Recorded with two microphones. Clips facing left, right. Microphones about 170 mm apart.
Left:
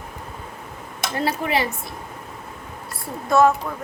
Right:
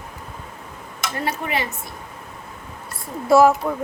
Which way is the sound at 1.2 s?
35° left (ahead or behind).